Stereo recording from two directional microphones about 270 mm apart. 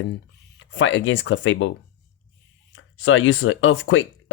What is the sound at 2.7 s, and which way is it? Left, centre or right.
Speech, left.